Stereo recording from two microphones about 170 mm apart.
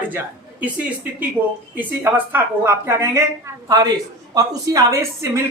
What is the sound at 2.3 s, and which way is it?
A woman's voice, 15° right (ahead or behind).